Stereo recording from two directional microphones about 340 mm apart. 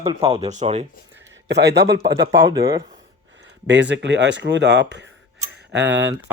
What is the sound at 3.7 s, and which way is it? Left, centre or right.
Speech, right.